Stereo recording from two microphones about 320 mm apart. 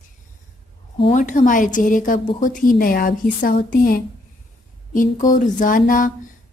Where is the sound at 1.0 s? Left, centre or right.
Left.